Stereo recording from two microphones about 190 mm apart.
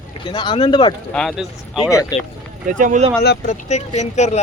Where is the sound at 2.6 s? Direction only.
40° right (ahead or behind).